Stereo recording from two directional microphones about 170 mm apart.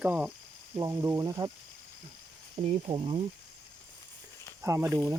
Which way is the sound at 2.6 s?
30° right (ahead or behind).